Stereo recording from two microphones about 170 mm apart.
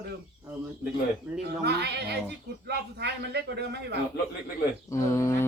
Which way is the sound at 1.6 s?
75° right (ahead or behind).